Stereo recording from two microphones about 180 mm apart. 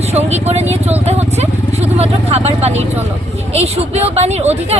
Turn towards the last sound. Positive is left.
turn(degrees=-35)  # may be behind; listen again after turning